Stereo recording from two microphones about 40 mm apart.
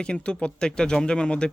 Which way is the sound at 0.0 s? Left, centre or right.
Left.